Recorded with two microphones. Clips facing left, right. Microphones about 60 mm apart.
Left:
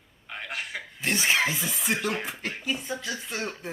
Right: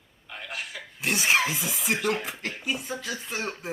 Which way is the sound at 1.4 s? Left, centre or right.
Centre.